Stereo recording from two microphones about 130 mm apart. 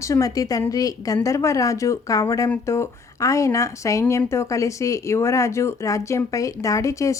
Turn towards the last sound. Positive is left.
turn(degrees=25)  # may be behind; listen again after turning